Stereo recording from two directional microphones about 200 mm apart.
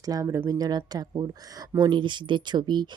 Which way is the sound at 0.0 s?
15° right (ahead or behind).